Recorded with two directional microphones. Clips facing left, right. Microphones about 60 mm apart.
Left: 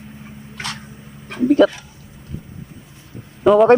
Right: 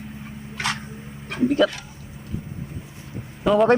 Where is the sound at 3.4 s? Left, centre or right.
Centre.